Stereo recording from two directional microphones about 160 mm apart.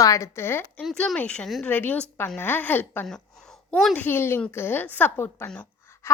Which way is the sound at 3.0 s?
5° left (ahead or behind).